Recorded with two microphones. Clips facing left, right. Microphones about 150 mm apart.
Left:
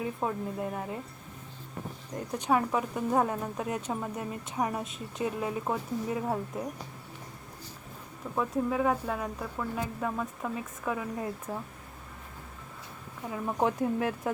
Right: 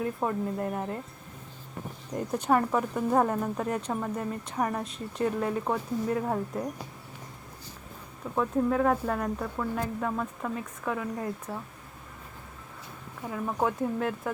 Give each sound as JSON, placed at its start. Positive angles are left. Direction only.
{"t": 0.0, "sound": "speech", "side_deg": 5}
{"t": 2.1, "sound": "speech", "side_deg": 0}
{"t": 8.4, "sound": "speech", "side_deg": 5}
{"t": 13.3, "sound": "speech", "side_deg": 20}